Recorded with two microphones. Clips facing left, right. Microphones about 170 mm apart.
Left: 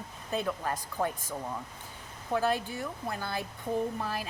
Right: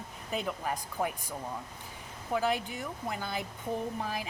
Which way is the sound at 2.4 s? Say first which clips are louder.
Left 1 dB; 15° right (ahead or behind).